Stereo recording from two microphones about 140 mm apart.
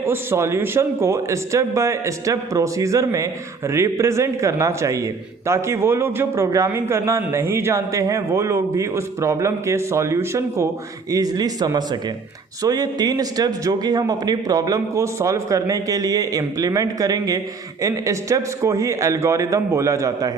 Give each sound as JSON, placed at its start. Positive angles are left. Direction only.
{"t": 0.0, "sound": "a man's voice", "side_deg": -15}